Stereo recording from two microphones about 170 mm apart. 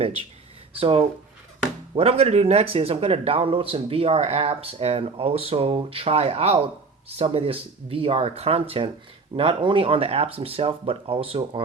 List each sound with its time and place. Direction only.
0.8 s speech: 35° right (ahead or behind)